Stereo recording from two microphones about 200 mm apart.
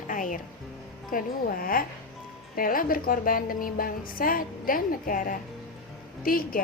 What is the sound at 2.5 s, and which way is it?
A woman's voice, 45° left (ahead or behind).